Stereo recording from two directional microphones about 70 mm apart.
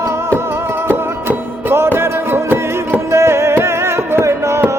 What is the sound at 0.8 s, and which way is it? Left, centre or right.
Music, right.